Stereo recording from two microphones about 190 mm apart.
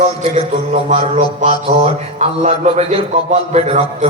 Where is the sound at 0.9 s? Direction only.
35° right (ahead or behind).